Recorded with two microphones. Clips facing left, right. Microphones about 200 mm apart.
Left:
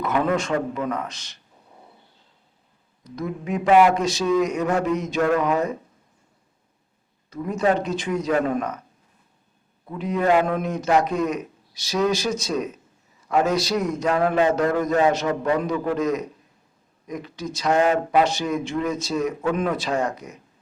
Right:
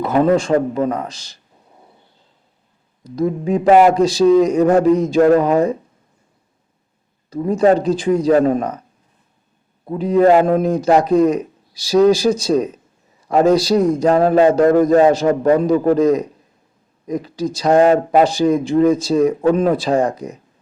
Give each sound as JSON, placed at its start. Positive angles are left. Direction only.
{"t": 0.0, "sound": "a man's voice", "side_deg": -35}
{"t": 3.0, "sound": "a man's voice", "side_deg": -30}
{"t": 7.3, "sound": "a man's voice", "side_deg": -30}
{"t": 9.8, "sound": "a man's voice", "side_deg": -30}